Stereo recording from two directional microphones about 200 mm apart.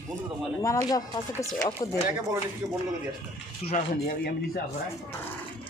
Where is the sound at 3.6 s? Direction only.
30° left (ahead or behind).